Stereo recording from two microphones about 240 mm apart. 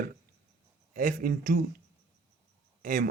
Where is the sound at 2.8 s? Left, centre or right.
Right.